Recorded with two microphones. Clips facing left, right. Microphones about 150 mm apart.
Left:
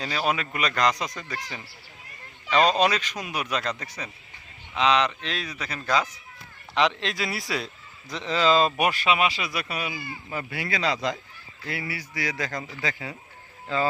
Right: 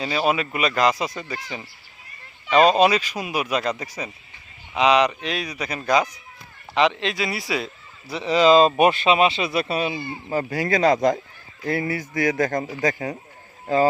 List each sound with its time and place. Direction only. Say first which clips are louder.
0.0 s speech: right 5 dB; 10° right (ahead or behind)
6.7 s a man's voice: right 4 dB; centre (ahead or behind); by 13.8 s 40° right (ahead or behind)